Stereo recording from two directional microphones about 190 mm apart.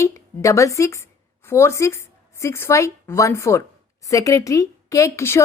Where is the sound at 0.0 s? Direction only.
15° left (ahead or behind).